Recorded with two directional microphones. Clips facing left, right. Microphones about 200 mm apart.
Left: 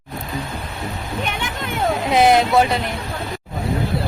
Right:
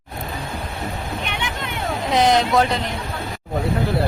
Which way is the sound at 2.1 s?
10° left (ahead or behind).